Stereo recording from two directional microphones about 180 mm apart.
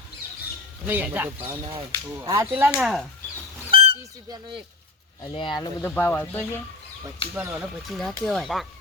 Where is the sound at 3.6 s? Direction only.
30° right (ahead or behind).